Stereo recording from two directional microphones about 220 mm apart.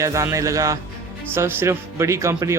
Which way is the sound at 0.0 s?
15° right (ahead or behind).